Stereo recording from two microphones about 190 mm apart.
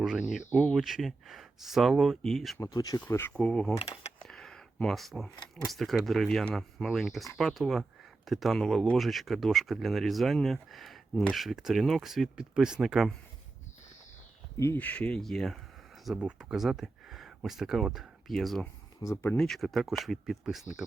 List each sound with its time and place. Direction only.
0.0 s speech: centre (ahead or behind)
2.6 s speech: 20° left (ahead or behind); by 13.1 s centre (ahead or behind)
14.6 s speech: 10° left (ahead or behind)
19.0 s speech: 15° left (ahead or behind)